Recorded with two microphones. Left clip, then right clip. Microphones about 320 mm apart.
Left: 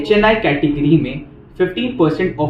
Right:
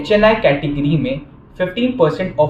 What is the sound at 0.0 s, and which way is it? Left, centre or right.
Speech, centre.